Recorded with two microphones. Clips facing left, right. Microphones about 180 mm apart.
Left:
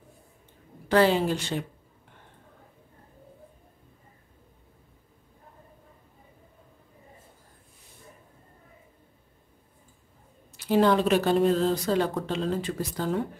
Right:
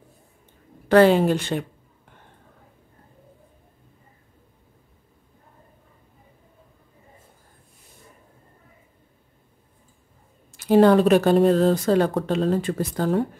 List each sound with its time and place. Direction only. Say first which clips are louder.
0.8 s a woman's voice: right 6 dB; 55° right (ahead or behind)
10.6 s speech: right 7 dB; 50° right (ahead or behind)